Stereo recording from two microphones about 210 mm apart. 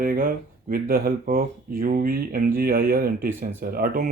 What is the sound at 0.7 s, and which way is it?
Speech, 45° right (ahead or behind).